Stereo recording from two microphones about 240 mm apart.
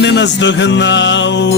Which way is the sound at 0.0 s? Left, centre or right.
Left.